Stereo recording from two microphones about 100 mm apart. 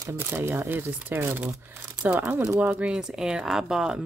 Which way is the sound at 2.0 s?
15° right (ahead or behind).